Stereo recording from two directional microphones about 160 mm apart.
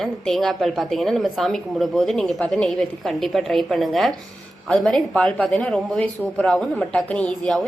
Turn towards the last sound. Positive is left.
turn(degrees=5)  # may be behind; listen again after turning